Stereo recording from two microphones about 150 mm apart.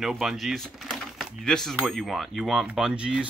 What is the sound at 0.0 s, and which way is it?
Speech, 5° right (ahead or behind).